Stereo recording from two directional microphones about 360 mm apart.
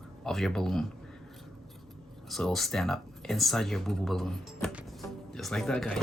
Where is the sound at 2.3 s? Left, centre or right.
Centre.